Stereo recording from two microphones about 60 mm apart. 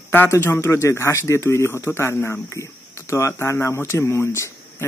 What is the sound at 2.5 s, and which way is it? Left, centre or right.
Speech, left.